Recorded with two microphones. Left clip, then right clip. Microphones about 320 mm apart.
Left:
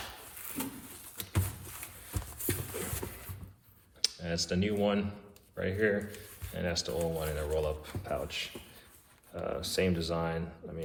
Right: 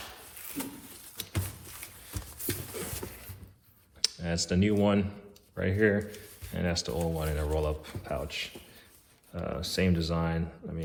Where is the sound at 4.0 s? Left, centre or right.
Right.